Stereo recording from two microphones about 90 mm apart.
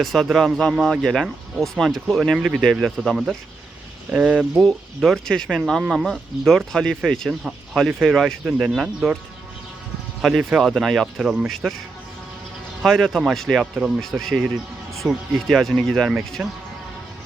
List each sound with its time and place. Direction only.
0.0 s speech: centre (ahead or behind)
4.9 s speech: centre (ahead or behind)
10.2 s speech: 5° right (ahead or behind)
12.8 s speech: centre (ahead or behind)
13.6 s speech: 10° right (ahead or behind)
14.0 s speech: centre (ahead or behind)
16.4 s speech: 20° right (ahead or behind)